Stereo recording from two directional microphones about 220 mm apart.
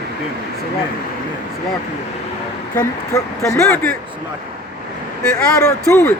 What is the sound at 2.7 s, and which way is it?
Speech, 15° left (ahead or behind).